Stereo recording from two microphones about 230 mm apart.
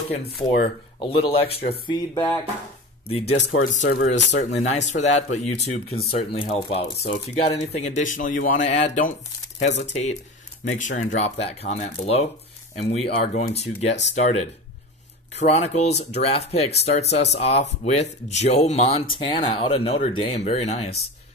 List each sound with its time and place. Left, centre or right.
0.2 s speech: left
1.1 s speech: left
1.9 s music: centre
3.1 s speech: left
15.3 s speech: left